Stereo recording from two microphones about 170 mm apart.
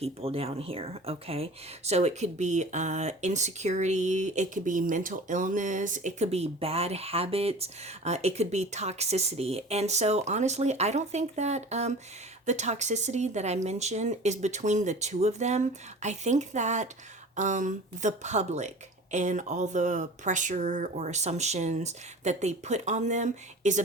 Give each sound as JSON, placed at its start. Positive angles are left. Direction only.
{"t": 0.0, "sound": "speech", "side_deg": -35}